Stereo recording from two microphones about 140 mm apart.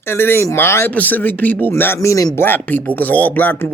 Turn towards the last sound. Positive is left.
turn(degrees=15)  # may be behind; listen again after turning